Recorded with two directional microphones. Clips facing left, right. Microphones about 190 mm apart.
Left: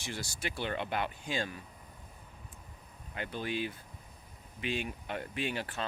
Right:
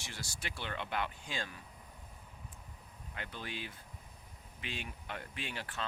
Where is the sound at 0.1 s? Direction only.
15° left (ahead or behind).